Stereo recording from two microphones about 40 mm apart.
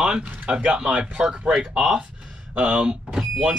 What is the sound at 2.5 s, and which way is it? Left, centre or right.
Speech, right.